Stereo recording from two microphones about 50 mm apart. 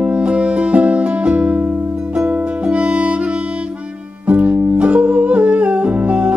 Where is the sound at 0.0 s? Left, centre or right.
Centre.